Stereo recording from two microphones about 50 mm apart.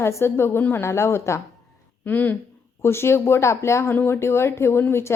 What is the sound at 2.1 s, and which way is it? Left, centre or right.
Speech, left.